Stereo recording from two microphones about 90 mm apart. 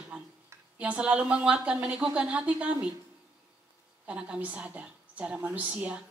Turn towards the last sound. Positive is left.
turn(degrees=-15)  # may be behind; listen again after turning